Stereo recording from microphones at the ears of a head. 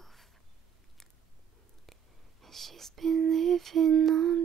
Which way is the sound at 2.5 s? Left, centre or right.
Right.